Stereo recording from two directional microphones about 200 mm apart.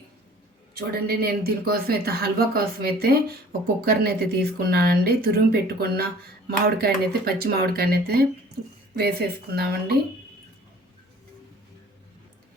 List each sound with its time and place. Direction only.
0.7 s speech: 50° right (ahead or behind)